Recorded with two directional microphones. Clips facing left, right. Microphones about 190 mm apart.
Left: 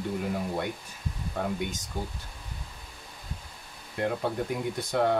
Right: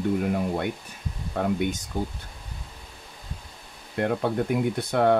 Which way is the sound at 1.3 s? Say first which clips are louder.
Right 6 dB; 60° right (ahead or behind).